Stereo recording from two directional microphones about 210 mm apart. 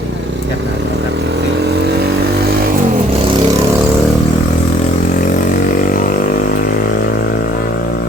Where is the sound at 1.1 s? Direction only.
55° right (ahead or behind).